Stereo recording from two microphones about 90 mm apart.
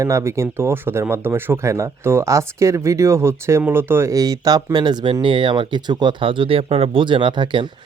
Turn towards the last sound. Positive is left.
turn(degrees=-65)  # may be behind; listen again after turning